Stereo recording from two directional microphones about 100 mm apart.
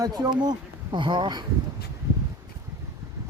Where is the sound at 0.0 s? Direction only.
45° right (ahead or behind).